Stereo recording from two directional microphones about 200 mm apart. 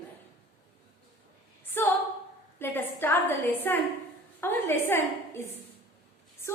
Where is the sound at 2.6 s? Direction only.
10° left (ahead or behind).